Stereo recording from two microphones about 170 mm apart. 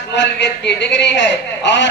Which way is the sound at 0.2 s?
90° left.